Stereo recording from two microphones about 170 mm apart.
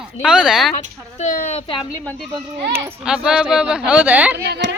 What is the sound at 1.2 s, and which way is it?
Speech, 40° left (ahead or behind).